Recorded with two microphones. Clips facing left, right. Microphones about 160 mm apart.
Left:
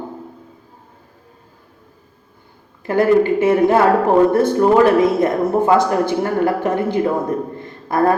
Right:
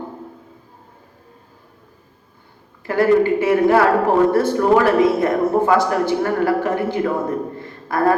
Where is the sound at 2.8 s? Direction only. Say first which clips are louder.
Left 1 dB; 20° left (ahead or behind).